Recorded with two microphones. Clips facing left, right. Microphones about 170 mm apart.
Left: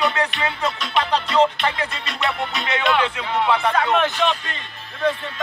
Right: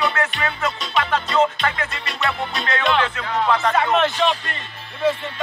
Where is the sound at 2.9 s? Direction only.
10° left (ahead or behind).